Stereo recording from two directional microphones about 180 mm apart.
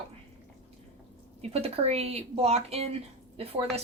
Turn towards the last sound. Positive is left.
turn(degrees=-35)  # may be behind; listen again after turning